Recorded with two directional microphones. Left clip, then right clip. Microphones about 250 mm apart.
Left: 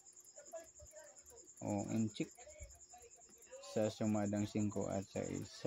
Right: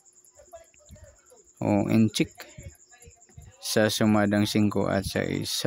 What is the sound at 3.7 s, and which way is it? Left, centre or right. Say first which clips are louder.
Speech: right 15 dB; right.